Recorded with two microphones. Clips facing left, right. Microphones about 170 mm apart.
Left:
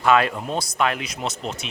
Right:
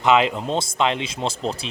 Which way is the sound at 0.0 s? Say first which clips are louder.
Right 1 dB; 20° right (ahead or behind).